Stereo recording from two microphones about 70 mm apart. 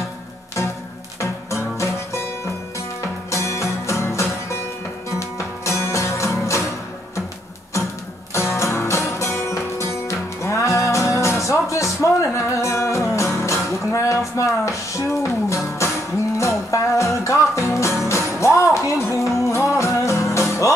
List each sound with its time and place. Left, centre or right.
1.2 s music: left
5.7 s music: left
8.3 s music: left